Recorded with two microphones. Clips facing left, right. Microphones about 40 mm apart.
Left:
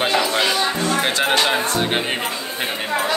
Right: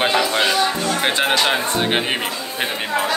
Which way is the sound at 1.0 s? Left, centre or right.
Centre.